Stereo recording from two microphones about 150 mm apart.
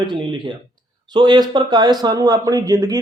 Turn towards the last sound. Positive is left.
turn(degrees=-25)  # may be behind; listen again after turning